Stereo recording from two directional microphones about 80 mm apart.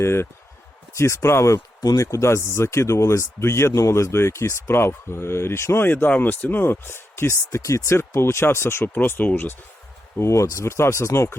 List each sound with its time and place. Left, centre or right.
0.0 s speech: left
1.5 s speech: left
10.2 s speech: left